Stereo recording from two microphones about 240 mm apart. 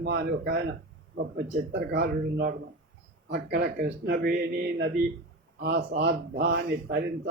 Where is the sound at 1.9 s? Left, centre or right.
Right.